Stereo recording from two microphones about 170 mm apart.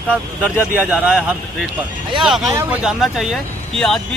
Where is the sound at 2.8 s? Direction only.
Centre (ahead or behind).